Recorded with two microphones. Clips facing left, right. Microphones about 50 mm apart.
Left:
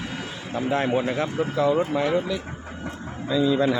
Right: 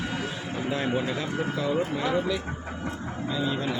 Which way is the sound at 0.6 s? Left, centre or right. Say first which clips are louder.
Left 5 dB; left.